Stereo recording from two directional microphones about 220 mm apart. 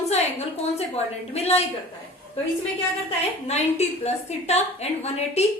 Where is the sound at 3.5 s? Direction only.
30° left (ahead or behind).